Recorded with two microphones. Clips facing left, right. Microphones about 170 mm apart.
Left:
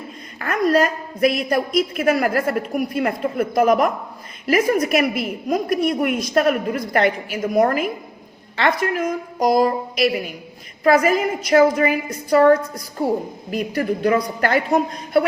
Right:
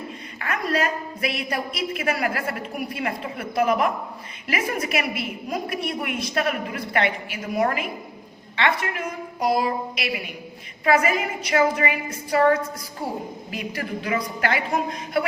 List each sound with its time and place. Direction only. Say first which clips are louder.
0.4 s a woman's voice: left 7 dB; 45° left (ahead or behind)